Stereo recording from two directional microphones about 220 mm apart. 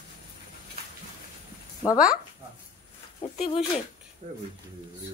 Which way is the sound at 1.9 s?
5° right (ahead or behind).